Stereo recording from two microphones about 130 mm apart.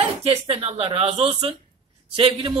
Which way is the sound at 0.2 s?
50° right (ahead or behind).